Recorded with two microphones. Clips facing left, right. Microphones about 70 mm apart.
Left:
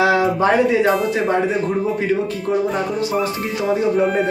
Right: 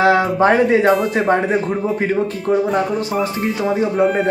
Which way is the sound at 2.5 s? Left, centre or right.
Right.